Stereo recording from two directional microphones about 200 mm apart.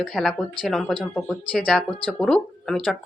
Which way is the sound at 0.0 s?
Centre (ahead or behind).